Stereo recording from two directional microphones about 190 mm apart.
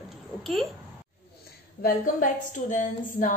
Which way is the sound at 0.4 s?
Centre (ahead or behind).